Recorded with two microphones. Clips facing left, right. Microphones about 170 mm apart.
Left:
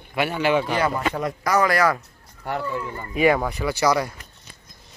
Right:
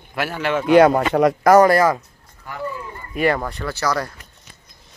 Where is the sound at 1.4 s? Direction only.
45° right (ahead or behind).